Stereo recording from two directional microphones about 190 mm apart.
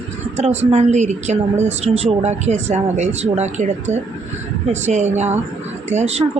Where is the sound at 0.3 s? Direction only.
35° right (ahead or behind).